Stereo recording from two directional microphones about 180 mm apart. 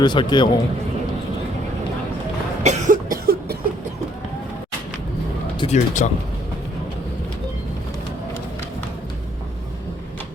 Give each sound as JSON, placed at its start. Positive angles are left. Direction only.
{"t": 0.0, "sound": "a man's voice", "side_deg": 25}
{"t": 2.6, "sound": "cough", "side_deg": -45}
{"t": 5.5, "sound": "speech", "side_deg": 40}